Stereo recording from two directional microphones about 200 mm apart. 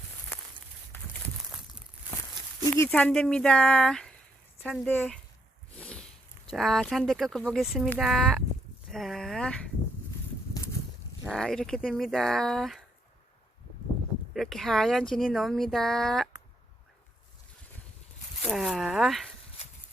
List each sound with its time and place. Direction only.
2.7 s speech: 10° left (ahead or behind)
5.7 s a sound: 5° left (ahead or behind)
6.5 s speech: centre (ahead or behind)
11.3 s speech: centre (ahead or behind)
14.3 s speech: centre (ahead or behind)
18.4 s speech: centre (ahead or behind)
19.6 s a sound: 30° left (ahead or behind)